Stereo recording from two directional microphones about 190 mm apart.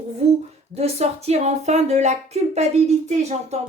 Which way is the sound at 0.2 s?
35° right (ahead or behind).